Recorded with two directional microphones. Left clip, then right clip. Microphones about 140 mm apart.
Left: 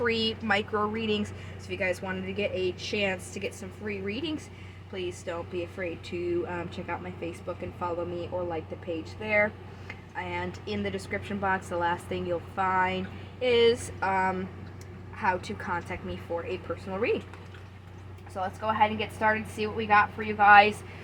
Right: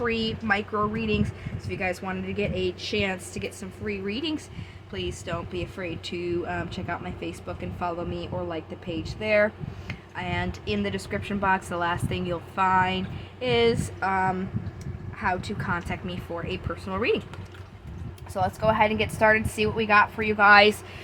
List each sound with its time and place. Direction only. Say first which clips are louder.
0.0 s a woman's voice: even; 10° right (ahead or behind); by 17.2 s 55° right (ahead or behind)
18.3 s a woman's voice: right 4 dB; 90° right